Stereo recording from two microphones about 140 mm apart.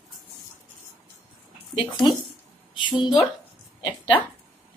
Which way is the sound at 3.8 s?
35° left (ahead or behind).